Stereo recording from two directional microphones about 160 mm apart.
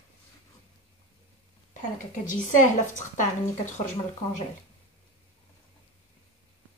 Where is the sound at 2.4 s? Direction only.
50° left (ahead or behind).